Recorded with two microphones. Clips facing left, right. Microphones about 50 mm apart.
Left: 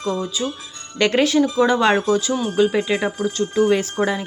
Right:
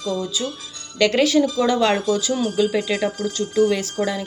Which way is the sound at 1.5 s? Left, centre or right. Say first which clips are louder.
Left 2 dB; left.